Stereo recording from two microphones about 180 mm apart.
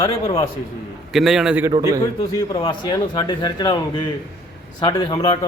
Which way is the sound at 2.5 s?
25° left (ahead or behind).